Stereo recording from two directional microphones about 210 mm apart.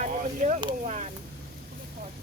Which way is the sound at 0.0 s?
35° right (ahead or behind).